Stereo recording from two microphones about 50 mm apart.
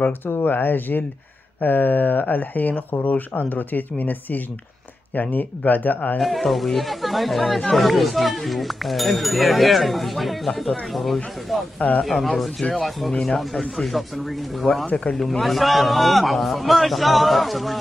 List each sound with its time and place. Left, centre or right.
0.3 s speech: left
6.1 s speech: centre
13.1 s speech: centre
13.4 s speech: centre